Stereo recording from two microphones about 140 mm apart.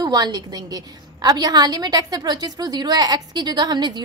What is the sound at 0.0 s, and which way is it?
A woman's voice, 30° right (ahead or behind).